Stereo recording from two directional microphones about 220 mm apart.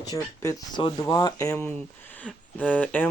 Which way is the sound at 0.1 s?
20° left (ahead or behind).